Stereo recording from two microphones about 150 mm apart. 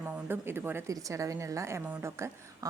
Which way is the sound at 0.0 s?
15° right (ahead or behind).